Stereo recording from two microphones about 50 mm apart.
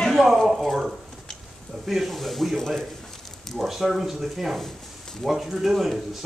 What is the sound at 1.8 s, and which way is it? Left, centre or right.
A man's voice, centre.